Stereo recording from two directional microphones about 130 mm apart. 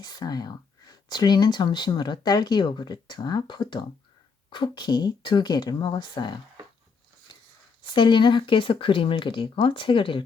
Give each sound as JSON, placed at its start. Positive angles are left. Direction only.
{"t": 0.0, "sound": "speech", "side_deg": 30}
{"t": 7.9, "sound": "speech", "side_deg": 40}